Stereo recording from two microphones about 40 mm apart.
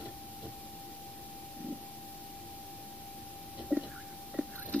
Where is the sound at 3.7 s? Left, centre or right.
Right.